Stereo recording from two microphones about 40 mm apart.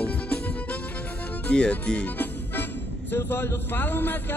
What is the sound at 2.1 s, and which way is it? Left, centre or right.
Music, left.